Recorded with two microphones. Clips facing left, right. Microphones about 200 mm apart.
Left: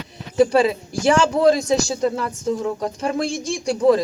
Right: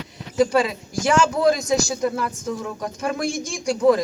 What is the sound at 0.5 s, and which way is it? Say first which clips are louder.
A man's voice: left 3 dB; 30° left (ahead or behind).